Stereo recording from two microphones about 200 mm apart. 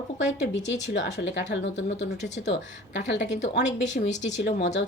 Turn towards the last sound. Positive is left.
turn(degrees=55)  # may be behind; listen again after turning